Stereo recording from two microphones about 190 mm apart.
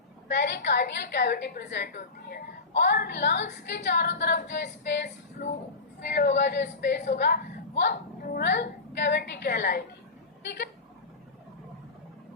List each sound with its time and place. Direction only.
0.3 s a woman's voice: 65° left (ahead or behind)
3.7 s female singing: 65° left (ahead or behind)
6.1 s a woman's voice: 65° left (ahead or behind)